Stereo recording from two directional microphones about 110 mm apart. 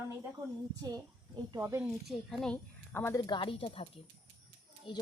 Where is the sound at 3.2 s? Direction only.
45° left (ahead or behind).